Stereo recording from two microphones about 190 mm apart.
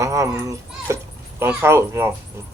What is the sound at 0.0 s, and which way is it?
A child's voice, 15° right (ahead or behind).